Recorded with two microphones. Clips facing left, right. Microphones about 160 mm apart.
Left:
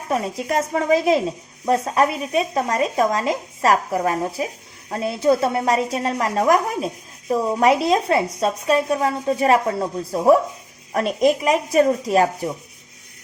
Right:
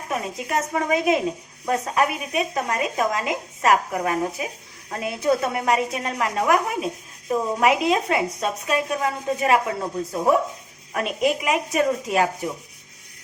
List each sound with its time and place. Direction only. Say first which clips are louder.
0.1 s speech: left 4 dB; 35° left (ahead or behind)
7.6 s speech: left 3 dB; 35° left (ahead or behind)